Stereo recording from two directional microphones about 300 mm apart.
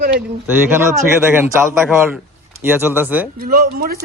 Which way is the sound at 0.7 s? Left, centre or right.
Centre.